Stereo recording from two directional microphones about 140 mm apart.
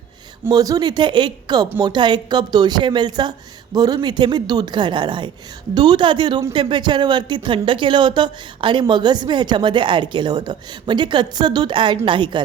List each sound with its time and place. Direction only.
0.5 s speech: 25° right (ahead or behind)